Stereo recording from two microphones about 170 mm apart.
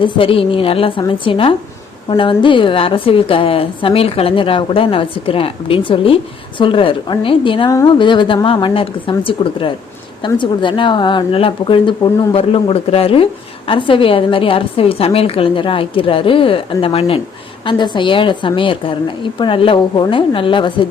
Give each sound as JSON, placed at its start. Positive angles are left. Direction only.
{"t": 0.0, "sound": "a woman's voice", "side_deg": 30}